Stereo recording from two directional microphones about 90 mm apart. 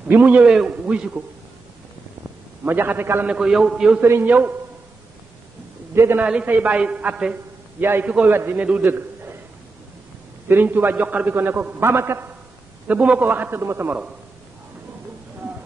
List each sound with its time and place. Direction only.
0.1 s a man's voice: 15° right (ahead or behind)
2.6 s a man's voice: 20° right (ahead or behind)
3.3 s a man's voice: 10° right (ahead or behind)
4.0 s a man's voice: 25° right (ahead or behind)
5.9 s a man's voice: 30° right (ahead or behind)
6.2 s a man's voice: 15° right (ahead or behind)
7.8 s a man's voice: 25° right (ahead or behind)
8.8 s a sound: 25° right (ahead or behind)
10.5 s a man's voice: 20° right (ahead or behind)
12.8 s a man's voice: 15° right (ahead or behind)